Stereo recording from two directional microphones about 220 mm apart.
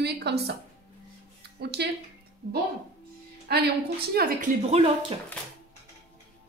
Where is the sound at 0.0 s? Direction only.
50° right (ahead or behind).